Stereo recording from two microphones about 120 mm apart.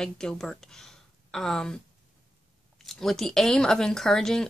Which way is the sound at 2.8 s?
Centre (ahead or behind).